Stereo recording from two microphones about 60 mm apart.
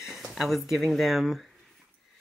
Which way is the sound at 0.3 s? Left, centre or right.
Centre.